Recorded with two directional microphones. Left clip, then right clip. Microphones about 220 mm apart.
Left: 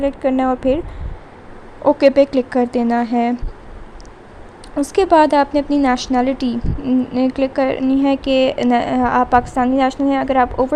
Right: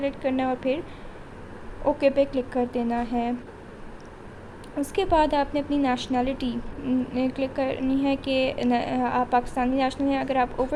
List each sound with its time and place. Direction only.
0.0 s a woman's voice: 25° left (ahead or behind)
1.8 s a woman's voice: 25° left (ahead or behind)
4.8 s a woman's voice: 25° left (ahead or behind)